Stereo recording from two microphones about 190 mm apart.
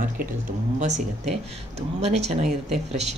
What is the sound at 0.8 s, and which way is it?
Speech, 40° right (ahead or behind).